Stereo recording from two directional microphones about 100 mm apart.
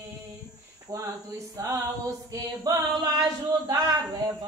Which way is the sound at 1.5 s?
30° right (ahead or behind).